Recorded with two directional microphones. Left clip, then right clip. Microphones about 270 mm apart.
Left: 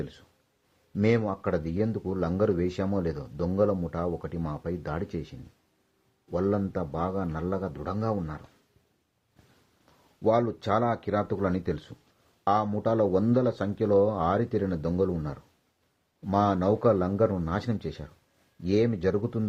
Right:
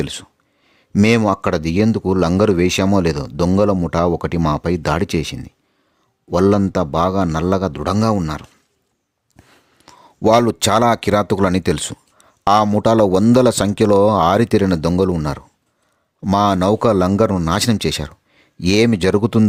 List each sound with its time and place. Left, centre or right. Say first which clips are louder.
0.9 s speech: right 11 dB; right
9.8 s speech: right 10 dB; right